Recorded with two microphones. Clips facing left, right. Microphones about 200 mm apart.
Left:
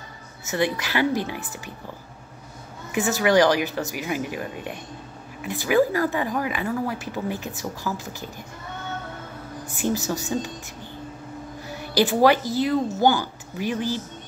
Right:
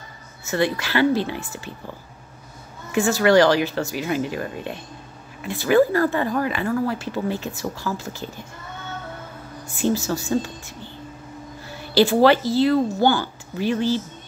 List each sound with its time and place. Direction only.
0.5 s speech: 20° left (ahead or behind)
2.9 s speech: 20° left (ahead or behind)
9.9 s speech: 20° left (ahead or behind)
11.9 s speech: 15° left (ahead or behind)